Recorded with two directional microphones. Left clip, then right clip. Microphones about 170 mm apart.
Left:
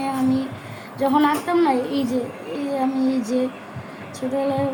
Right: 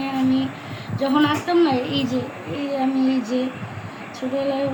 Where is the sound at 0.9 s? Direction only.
55° left (ahead or behind).